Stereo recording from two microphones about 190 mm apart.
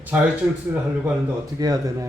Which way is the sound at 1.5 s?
20° right (ahead or behind).